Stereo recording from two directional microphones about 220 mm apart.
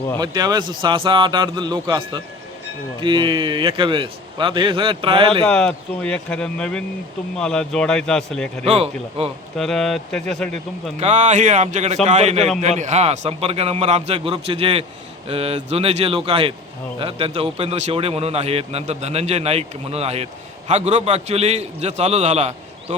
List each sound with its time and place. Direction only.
0.2 s a man's voice: 20° right (ahead or behind)
5.5 s speech: 5° left (ahead or behind)
8.6 s a man's voice: 30° right (ahead or behind)
9.6 s speech: centre (ahead or behind)
11.0 s a man's voice: 30° right (ahead or behind)